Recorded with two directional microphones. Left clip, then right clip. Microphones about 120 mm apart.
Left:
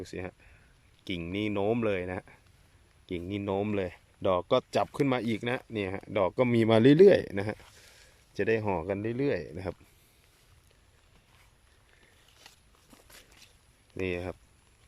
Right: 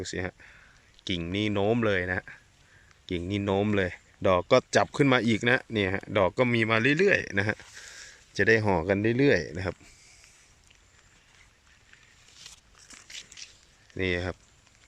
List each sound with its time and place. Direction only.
0.0 s speech: 5° left (ahead or behind)
6.7 s speech: 50° left (ahead or behind)
7.3 s speech: 15° left (ahead or behind); by 9.5 s 5° right (ahead or behind)
9.5 s speech: 15° left (ahead or behind)
13.3 s a sound: 20° left (ahead or behind)
13.9 s speech: 10° left (ahead or behind)